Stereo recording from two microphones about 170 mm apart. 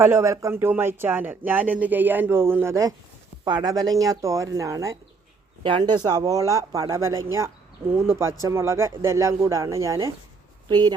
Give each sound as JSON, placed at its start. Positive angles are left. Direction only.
{"t": 0.0, "sound": "speech", "side_deg": -15}